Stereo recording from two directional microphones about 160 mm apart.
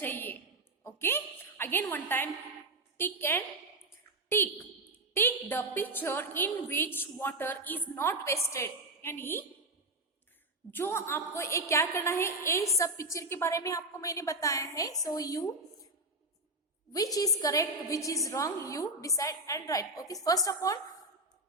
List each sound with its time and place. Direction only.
0.0 s a sound: 10° left (ahead or behind)
1.9 s a woman's voice: 10° left (ahead or behind)
10.7 s a woman's voice: 15° left (ahead or behind)
16.9 s a woman's voice: 20° left (ahead or behind)